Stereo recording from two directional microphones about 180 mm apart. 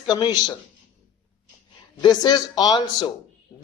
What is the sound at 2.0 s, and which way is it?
A man's voice, 25° left (ahead or behind).